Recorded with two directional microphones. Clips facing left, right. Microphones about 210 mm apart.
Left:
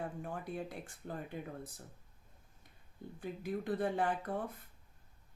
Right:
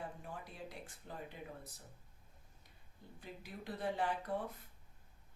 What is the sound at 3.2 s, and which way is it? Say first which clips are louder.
Speech: left 11 dB; 50° left (ahead or behind).